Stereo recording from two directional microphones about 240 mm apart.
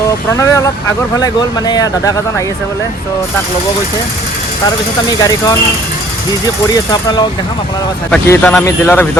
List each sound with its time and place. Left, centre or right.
0.3 s speech: centre
5.0 s speech: centre
6.9 s speech: centre
8.1 s speech: centre